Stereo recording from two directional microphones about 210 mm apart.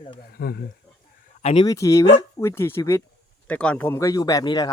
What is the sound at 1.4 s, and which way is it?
Speech, 30° left (ahead or behind).